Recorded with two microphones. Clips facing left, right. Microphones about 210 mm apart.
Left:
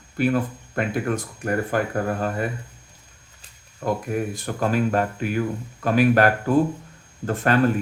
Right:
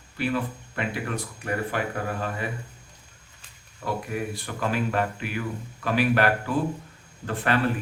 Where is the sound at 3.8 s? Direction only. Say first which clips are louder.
Left 5 dB; 45° left (ahead or behind).